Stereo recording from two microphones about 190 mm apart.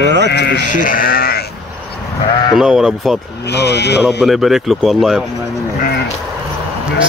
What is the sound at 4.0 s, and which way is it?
A man's voice, 5° right (ahead or behind).